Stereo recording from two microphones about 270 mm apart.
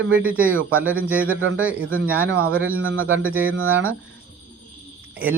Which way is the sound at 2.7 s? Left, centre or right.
Right.